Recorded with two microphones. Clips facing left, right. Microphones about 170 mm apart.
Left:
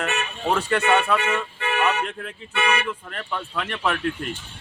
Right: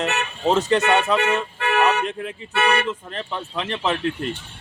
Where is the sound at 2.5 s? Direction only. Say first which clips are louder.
Right 3 dB; 65° right (ahead or behind).